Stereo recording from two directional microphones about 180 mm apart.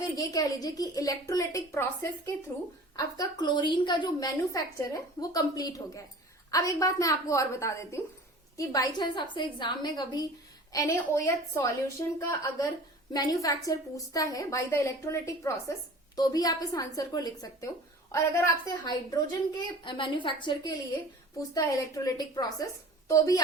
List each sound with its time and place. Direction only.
0.2 s a woman's voice: 20° left (ahead or behind)